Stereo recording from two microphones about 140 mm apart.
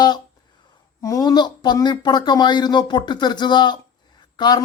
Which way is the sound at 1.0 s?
25° left (ahead or behind).